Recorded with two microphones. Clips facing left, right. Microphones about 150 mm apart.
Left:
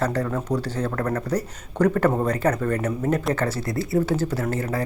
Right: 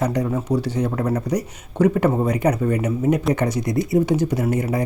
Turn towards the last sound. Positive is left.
turn(degrees=-15)  # may be behind; listen again after turning